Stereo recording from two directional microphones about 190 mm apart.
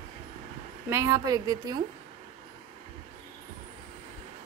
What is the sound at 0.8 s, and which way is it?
Speech, 15° right (ahead or behind).